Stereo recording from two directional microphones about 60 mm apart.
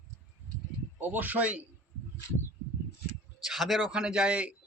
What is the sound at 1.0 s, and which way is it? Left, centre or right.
Speech, right.